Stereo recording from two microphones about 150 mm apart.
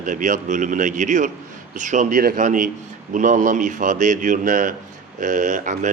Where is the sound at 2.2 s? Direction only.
70° right (ahead or behind).